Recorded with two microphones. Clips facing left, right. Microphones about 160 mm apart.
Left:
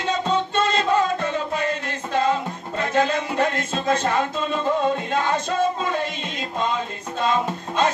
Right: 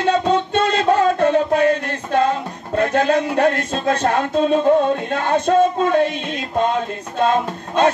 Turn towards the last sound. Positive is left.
turn(degrees=-55)  # may be behind; listen again after turning